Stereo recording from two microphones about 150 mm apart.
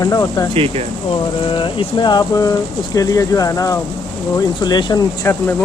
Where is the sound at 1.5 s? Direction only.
30° left (ahead or behind).